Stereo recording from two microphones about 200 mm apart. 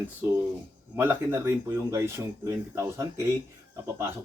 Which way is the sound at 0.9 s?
15° right (ahead or behind).